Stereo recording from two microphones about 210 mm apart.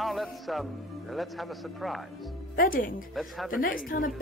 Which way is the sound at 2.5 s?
40° left (ahead or behind).